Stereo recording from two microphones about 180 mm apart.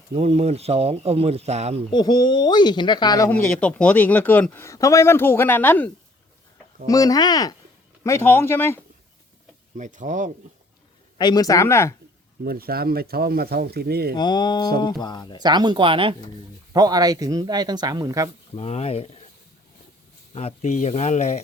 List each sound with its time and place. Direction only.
0.1 s speech: 35° right (ahead or behind)
1.9 s speech: 25° left (ahead or behind)
3.2 s speech: 10° left (ahead or behind)
9.7 s speech: 45° right (ahead or behind)
11.2 s speech: 20° left (ahead or behind)
12.5 s speech: 55° right (ahead or behind)
14.2 s speech: 25° left (ahead or behind)
15.4 s speech: 25° right (ahead or behind)
18.5 s speech: 35° left (ahead or behind)
20.3 s speech: 35° left (ahead or behind)